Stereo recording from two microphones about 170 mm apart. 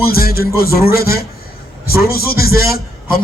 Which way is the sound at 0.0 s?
60° left (ahead or behind).